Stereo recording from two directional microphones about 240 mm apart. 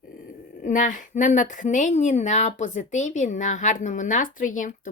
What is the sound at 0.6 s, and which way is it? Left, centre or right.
A woman's voice, left.